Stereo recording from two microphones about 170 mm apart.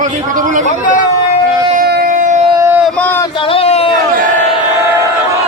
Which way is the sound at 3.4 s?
35° left (ahead or behind).